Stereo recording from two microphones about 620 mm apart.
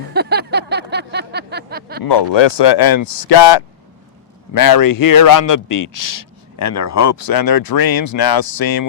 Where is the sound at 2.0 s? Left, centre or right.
Left.